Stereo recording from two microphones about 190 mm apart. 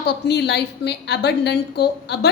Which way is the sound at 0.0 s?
65° left (ahead or behind).